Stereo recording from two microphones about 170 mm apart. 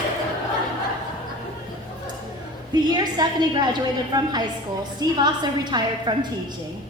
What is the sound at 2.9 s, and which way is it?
A woman's voice, 25° right (ahead or behind).